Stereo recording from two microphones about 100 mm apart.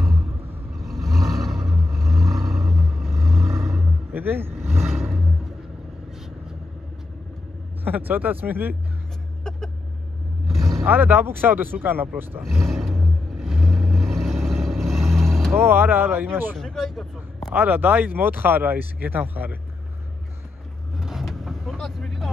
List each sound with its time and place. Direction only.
0.7 s vehicle: centre (ahead or behind)
3.8 s vehicle: 20° right (ahead or behind)
4.6 s vehicle: centre (ahead or behind)
7.8 s speech: 20° right (ahead or behind)
9.4 s a sound: 5° left (ahead or behind)
10.5 s vehicle: centre (ahead or behind)
10.8 s speech: 20° right (ahead or behind)
12.4 s vehicle: 5° left (ahead or behind)
15.5 s speech: 20° right (ahead or behind)
16.5 s a man's voice: 5° left (ahead or behind)
17.5 s speech: 20° right (ahead or behind)
21.0 s vehicle: centre (ahead or behind)